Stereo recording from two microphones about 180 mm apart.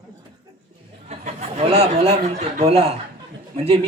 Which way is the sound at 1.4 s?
35° right (ahead or behind).